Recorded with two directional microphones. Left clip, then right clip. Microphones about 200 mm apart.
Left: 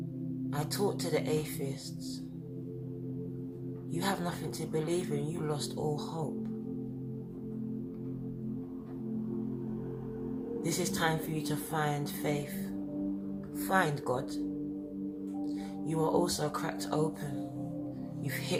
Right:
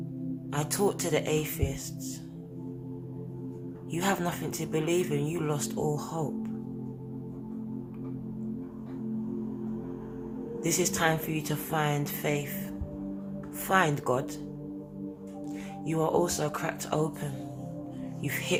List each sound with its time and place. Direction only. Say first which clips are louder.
0.5 s speech: right 5 dB; 30° right (ahead or behind)
3.9 s speech: right 5 dB; 30° right (ahead or behind)
10.7 s speech: right 5 dB; 25° right (ahead or behind)
13.7 s speech: right 4 dB; 25° right (ahead or behind)
15.9 s speech: right 3 dB; 20° right (ahead or behind)